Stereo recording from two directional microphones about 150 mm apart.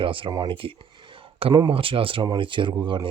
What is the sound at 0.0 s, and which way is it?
Speech, 35° right (ahead or behind).